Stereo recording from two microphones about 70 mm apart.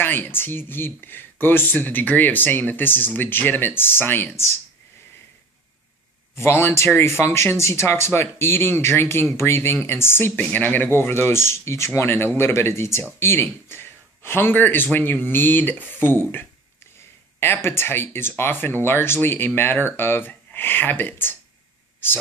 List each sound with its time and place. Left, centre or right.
0.0 s speech: left
6.3 s speech: left
17.4 s speech: left